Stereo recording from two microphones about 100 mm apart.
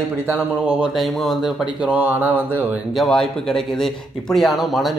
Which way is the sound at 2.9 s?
5° left (ahead or behind).